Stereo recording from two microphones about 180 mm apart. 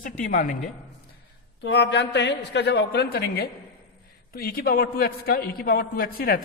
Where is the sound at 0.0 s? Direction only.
50° left (ahead or behind).